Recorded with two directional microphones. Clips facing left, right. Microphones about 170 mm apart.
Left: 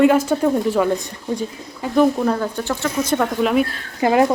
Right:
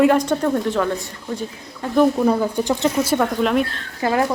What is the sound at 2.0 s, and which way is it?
Speech, 10° right (ahead or behind).